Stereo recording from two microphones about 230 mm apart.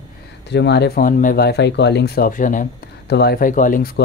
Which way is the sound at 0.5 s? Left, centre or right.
Left.